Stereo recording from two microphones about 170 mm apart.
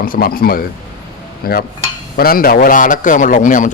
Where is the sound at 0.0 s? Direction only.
60° left (ahead or behind).